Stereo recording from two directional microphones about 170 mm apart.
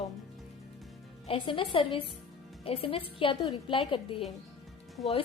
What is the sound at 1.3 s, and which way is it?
A woman's voice, 30° left (ahead or behind).